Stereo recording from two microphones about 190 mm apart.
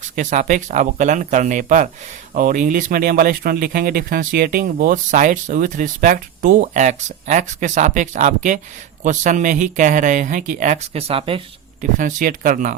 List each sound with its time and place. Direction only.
0.2 s speech: 40° right (ahead or behind)
11.8 s speech: 45° right (ahead or behind)